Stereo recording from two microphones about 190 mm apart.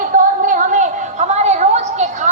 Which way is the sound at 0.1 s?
45° right (ahead or behind).